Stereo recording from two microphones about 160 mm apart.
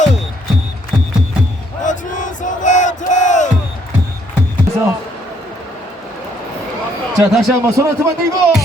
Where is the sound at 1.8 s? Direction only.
50° left (ahead or behind).